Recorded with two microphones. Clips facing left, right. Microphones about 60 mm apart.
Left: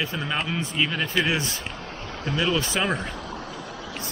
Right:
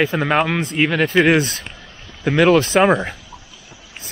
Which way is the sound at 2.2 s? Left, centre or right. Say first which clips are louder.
Right 11 dB; right.